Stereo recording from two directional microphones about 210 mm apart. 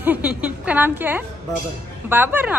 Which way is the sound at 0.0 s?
5° right (ahead or behind).